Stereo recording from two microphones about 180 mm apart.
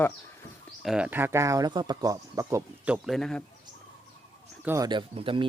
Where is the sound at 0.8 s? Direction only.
5° right (ahead or behind).